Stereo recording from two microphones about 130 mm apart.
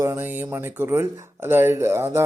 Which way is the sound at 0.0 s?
15° right (ahead or behind).